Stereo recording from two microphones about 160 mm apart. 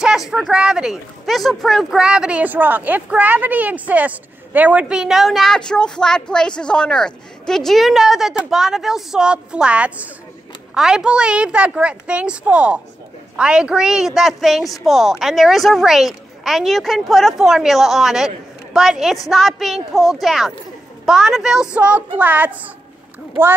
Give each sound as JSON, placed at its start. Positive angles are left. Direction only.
{"t": 0.3, "sound": "a woman's voice", "side_deg": -5}